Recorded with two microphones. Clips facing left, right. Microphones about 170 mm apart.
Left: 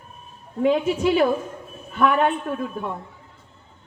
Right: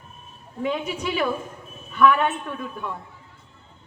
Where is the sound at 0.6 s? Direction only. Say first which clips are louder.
Left 7 dB; 40° left (ahead or behind).